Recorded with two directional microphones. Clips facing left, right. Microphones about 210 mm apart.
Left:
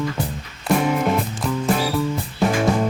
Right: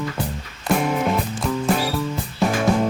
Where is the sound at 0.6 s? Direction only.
Centre (ahead or behind).